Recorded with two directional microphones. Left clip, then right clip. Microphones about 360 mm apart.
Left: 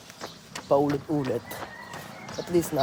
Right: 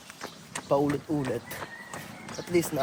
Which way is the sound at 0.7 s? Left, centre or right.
Centre.